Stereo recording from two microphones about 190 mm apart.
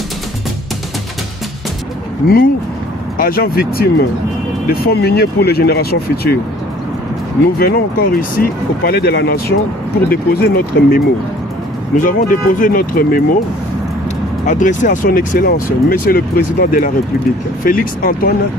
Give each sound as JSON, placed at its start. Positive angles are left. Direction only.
{"t": 3.2, "sound": "speech", "side_deg": 50}
{"t": 7.5, "sound": "speech", "side_deg": 55}
{"t": 14.4, "sound": "speech", "side_deg": 40}